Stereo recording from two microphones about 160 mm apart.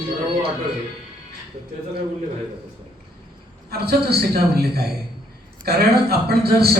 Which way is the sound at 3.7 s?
80° right.